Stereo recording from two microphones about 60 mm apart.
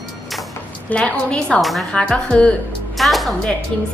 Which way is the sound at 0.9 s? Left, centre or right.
Centre.